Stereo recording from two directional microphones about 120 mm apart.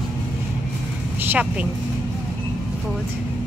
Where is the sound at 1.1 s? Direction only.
15° right (ahead or behind).